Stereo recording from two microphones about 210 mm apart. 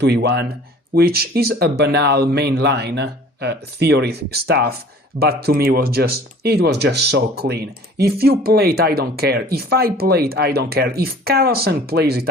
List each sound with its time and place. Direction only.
0.0 s speech: 50° right (ahead or behind)